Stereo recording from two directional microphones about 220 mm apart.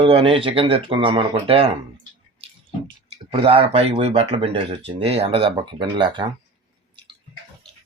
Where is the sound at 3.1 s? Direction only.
25° right (ahead or behind).